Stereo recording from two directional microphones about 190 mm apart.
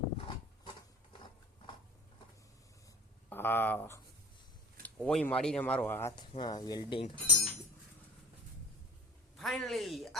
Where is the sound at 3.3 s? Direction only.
10° left (ahead or behind).